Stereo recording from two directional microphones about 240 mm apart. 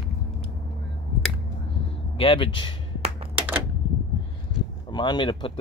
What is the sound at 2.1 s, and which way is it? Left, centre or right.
Speech, left.